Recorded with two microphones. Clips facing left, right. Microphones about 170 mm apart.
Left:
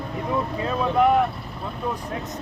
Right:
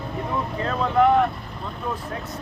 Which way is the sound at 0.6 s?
10° left (ahead or behind).